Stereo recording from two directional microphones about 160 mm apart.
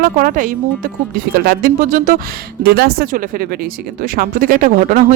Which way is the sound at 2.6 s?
85° right.